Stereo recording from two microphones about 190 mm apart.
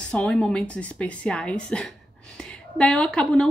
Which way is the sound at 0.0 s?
5° left (ahead or behind).